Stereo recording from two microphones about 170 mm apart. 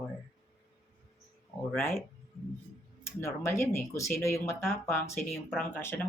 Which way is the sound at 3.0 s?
15° left (ahead or behind).